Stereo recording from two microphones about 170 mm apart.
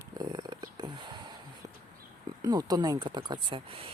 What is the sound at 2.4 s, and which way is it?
Speech, 25° right (ahead or behind).